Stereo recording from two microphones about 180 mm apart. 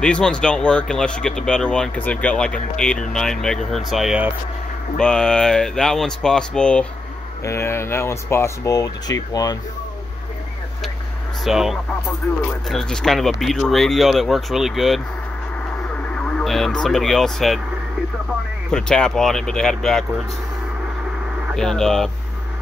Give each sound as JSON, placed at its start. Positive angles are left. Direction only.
{"t": 0.0, "sound": "speech", "side_deg": 5}
{"t": 11.4, "sound": "speech", "side_deg": 0}
{"t": 18.7, "sound": "speech", "side_deg": 5}
{"t": 21.5, "sound": "speech", "side_deg": 5}